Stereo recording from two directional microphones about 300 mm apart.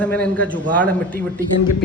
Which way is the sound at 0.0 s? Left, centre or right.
Centre.